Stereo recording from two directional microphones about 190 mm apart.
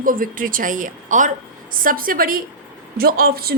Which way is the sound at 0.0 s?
45° right (ahead or behind).